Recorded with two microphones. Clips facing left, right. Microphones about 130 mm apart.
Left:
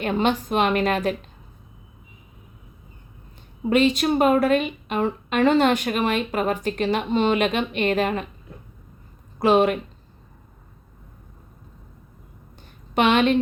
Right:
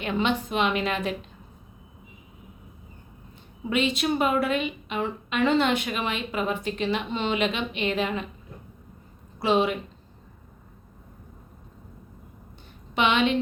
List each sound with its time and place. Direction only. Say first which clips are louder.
0.0 s a woman's voice: left 4 dB; 45° left (ahead or behind)
3.6 s a woman's voice: left 6 dB; 40° left (ahead or behind)
9.4 s a woman's voice: left 5 dB; 50° left (ahead or behind)
12.9 s a woman's voice: left 4 dB; 45° left (ahead or behind)